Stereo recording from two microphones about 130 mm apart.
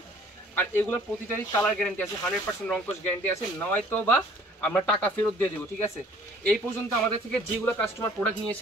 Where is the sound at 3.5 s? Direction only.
15° left (ahead or behind).